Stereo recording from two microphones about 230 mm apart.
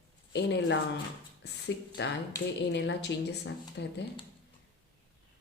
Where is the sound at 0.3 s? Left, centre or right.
Left.